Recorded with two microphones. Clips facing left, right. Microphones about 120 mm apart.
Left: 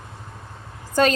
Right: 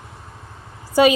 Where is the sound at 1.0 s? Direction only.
10° right (ahead or behind).